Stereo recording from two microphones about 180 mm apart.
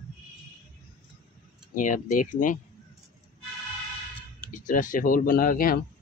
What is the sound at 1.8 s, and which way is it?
Speech, 45° left (ahead or behind).